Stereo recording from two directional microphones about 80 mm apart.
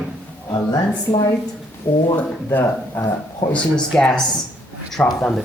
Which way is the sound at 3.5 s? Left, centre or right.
Centre.